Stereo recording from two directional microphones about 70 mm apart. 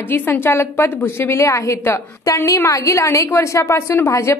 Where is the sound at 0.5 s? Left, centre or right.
Left.